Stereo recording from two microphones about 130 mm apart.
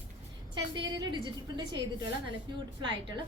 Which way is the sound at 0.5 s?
35° right (ahead or behind).